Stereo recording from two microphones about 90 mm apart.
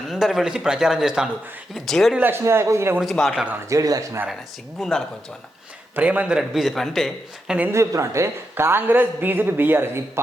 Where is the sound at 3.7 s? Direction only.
40° right (ahead or behind).